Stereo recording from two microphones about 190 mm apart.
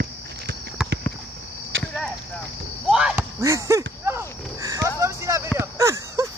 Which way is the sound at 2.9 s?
5° right (ahead or behind).